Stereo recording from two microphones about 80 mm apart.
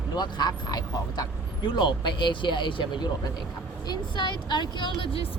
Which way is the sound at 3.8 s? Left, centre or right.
Left.